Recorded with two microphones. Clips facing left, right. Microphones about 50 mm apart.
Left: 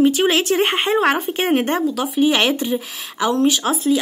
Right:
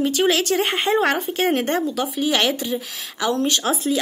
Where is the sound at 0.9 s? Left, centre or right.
Centre.